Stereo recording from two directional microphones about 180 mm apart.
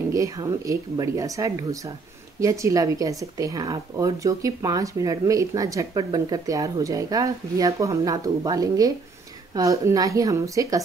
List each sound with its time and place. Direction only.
0.1 s speech: 20° right (ahead or behind)